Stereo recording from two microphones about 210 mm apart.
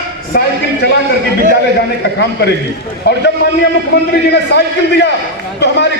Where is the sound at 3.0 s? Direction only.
55° left (ahead or behind).